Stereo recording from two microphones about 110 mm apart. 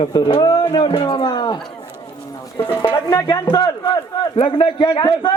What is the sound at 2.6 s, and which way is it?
Speech, 20° left (ahead or behind).